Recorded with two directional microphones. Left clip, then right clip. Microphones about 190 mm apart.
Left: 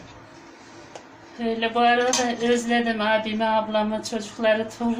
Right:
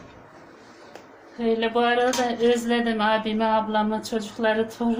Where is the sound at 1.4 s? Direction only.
30° right (ahead or behind).